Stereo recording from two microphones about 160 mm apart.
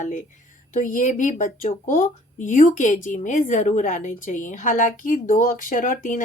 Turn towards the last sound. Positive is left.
turn(degrees=55)  # may be behind; listen again after turning